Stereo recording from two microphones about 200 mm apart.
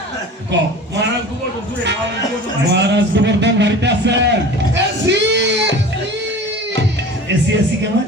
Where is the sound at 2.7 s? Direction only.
60° right (ahead or behind).